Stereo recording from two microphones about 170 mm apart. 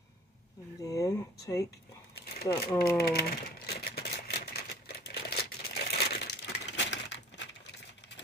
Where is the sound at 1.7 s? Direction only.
65° left (ahead or behind).